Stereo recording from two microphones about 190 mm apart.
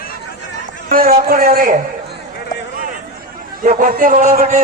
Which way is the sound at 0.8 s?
50° right (ahead or behind).